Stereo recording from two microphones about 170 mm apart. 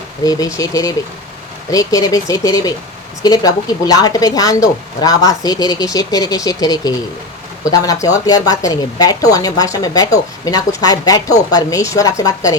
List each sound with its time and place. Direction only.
0.3 s speech: 20° left (ahead or behind)